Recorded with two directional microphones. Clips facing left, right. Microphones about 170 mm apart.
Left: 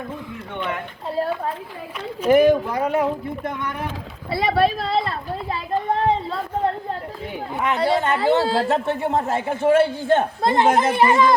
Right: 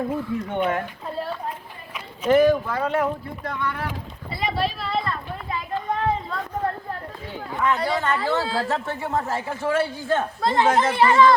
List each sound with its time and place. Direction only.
0.5 s speech: 45° right (ahead or behind)
2.2 s a man's voice: 15° left (ahead or behind)
4.3 s speech: 75° left (ahead or behind)
4.8 s a sound: 30° left (ahead or behind)
7.6 s a man's voice: 25° left (ahead or behind)